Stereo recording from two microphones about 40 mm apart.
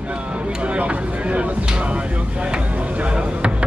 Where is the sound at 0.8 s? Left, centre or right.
Right.